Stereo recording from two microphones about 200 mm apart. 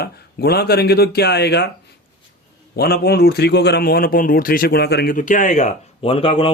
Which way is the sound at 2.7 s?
50° left (ahead or behind).